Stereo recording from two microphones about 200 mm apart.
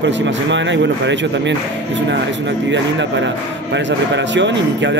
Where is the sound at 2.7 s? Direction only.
65° right (ahead or behind).